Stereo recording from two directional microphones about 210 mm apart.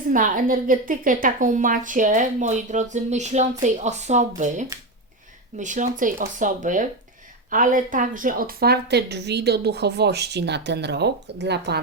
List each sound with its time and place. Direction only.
0.1 s a woman's voice: 40° right (ahead or behind)